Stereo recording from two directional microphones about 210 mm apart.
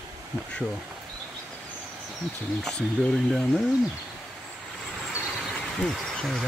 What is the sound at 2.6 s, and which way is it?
Speech, 5° left (ahead or behind).